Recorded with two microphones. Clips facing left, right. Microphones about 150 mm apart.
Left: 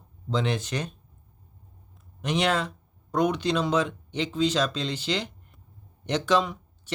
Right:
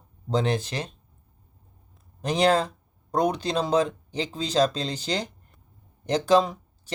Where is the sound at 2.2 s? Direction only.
35° right (ahead or behind).